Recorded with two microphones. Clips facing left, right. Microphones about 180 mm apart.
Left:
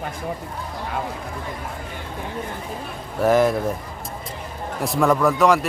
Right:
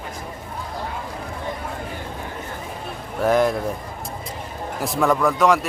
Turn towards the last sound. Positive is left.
turn(degrees=0)  # may be behind; listen again after turning